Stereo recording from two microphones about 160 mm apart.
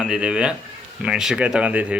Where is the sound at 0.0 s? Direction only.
5° right (ahead or behind).